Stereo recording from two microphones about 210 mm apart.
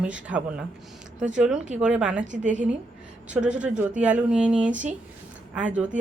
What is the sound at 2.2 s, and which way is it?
Speech, 35° right (ahead or behind).